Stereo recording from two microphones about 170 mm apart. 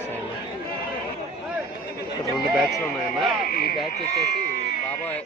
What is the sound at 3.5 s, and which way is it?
Frog, 60° left (ahead or behind).